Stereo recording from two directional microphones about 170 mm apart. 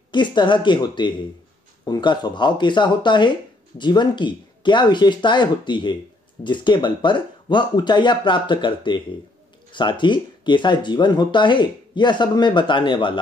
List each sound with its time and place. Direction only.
0.1 s speech: 25° left (ahead or behind)